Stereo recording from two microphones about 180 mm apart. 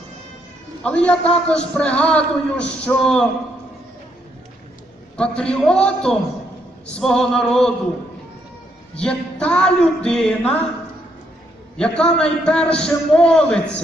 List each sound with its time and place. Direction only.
0.8 s a man's voice: 5° left (ahead or behind)
5.1 s a man's voice: 5° left (ahead or behind)
9.0 s a man's voice: 5° left (ahead or behind)
11.8 s a man's voice: 5° left (ahead or behind)